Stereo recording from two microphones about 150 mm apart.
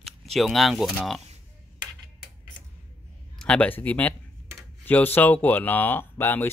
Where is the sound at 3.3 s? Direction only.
5° left (ahead or behind).